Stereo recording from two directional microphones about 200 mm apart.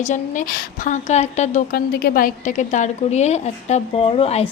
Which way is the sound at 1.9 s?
50° left (ahead or behind).